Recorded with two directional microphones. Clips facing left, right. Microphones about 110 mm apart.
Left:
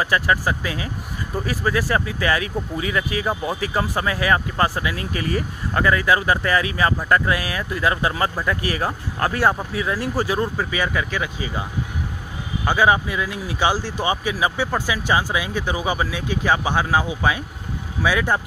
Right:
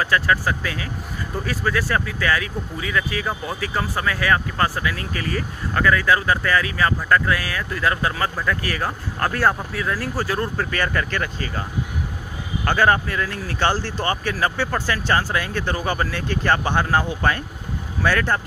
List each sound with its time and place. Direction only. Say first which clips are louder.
0.0 s speech: even; 20° left (ahead or behind)
12.6 s speech: left 1 dB; 10° left (ahead or behind)